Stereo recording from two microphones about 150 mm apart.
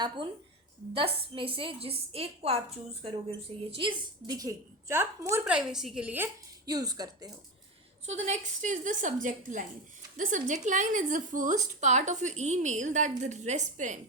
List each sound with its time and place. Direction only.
0.9 s a woman's voice: 35° right (ahead or behind); by 5.4 s 15° right (ahead or behind)
5.5 s a woman's voice: 5° right (ahead or behind)
6.7 s a woman's voice: 25° right (ahead or behind)
8.0 s a woman's voice: 50° right (ahead or behind)